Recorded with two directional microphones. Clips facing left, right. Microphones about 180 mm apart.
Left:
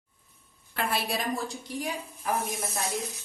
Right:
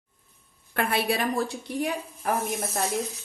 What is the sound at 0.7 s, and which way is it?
Speech, 55° right (ahead or behind).